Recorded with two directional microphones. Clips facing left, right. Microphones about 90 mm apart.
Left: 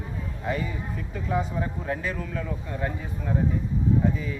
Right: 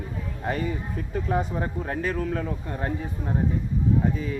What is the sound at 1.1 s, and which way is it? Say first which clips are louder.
Speech: right 2 dB; 45° right (ahead or behind).